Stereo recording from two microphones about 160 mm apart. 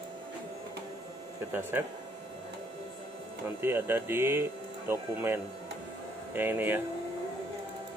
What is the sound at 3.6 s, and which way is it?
Speech, 15° right (ahead or behind).